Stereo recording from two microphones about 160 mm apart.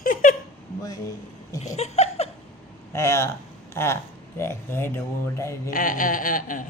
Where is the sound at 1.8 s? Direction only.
40° left (ahead or behind).